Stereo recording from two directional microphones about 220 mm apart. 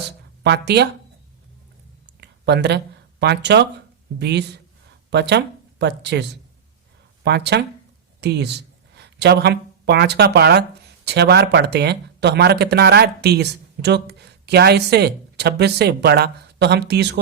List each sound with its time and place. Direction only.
0.4 s speech: 50° right (ahead or behind)
2.0 s a sound: 50° right (ahead or behind)
4.2 s speech: 50° right (ahead or behind)
7.3 s speech: 50° right (ahead or behind)